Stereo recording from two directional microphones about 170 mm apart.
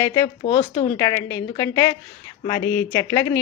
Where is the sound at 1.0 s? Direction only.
20° left (ahead or behind).